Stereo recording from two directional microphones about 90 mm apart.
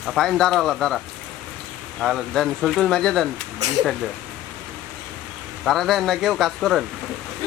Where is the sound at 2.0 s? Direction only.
Centre (ahead or behind).